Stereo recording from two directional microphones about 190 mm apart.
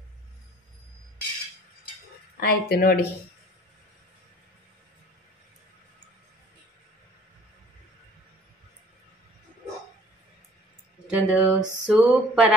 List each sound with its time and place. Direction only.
2.4 s speech: 50° left (ahead or behind)
11.1 s speech: 5° right (ahead or behind)